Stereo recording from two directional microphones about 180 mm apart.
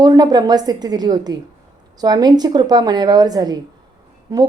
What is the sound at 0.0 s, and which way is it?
A woman's voice, 20° right (ahead or behind).